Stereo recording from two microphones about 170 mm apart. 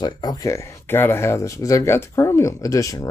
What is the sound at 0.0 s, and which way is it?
Speech, 25° left (ahead or behind).